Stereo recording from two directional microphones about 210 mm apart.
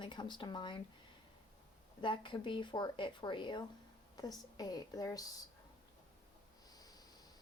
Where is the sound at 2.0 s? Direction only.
25° left (ahead or behind).